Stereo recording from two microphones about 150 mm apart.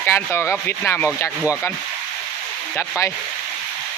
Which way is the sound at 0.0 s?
15° left (ahead or behind).